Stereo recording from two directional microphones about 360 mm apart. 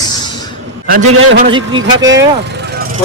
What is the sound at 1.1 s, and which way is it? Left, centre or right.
Speech, right.